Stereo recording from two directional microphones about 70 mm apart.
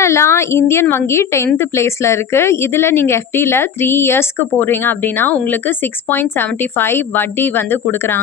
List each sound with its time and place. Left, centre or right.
0.0 s a woman's voice: left
6.8 s a woman's voice: left